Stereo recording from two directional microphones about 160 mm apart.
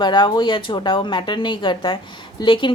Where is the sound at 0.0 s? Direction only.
30° left (ahead or behind).